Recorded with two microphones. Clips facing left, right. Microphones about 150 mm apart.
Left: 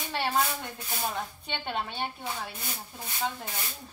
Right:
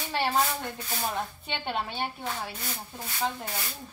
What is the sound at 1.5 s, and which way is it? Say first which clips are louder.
Speech: right 1 dB; centre (ahead or behind).